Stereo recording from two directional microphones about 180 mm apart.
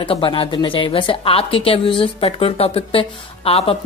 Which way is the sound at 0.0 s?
30° left (ahead or behind).